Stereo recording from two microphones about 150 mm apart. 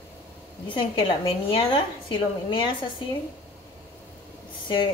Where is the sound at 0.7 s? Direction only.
35° left (ahead or behind).